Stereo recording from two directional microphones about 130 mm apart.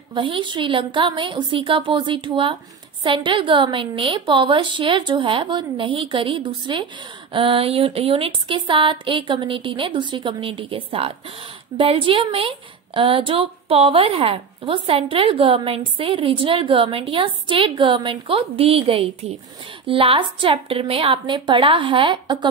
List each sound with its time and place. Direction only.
0.1 s a woman's voice: 40° right (ahead or behind)